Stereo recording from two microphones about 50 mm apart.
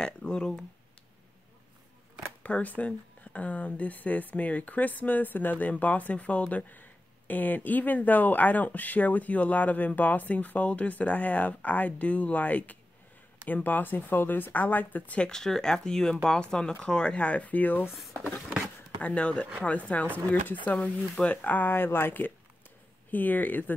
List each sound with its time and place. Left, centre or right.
0.0 s speech: centre
2.4 s speech: left
15.1 s speech: centre; by 17.8 s left
18.9 s speech: left